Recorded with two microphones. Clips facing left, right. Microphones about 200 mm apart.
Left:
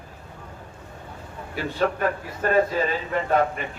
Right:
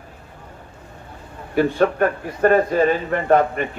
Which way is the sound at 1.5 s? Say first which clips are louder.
Right 8 dB; 55° right (ahead or behind).